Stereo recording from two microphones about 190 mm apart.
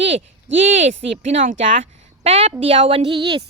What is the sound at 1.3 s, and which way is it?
A woman's voice, 35° right (ahead or behind).